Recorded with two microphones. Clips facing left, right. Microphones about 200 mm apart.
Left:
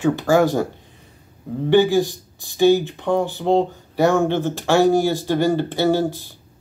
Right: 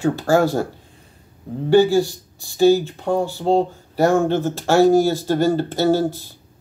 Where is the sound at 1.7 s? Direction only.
15° left (ahead or behind).